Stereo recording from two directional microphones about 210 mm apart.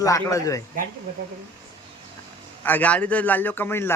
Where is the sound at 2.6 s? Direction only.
10° left (ahead or behind).